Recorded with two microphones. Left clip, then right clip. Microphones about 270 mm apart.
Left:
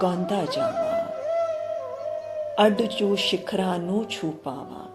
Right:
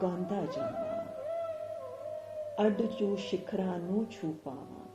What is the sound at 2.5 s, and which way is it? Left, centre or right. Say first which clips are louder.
Speech: left 10 dB; left.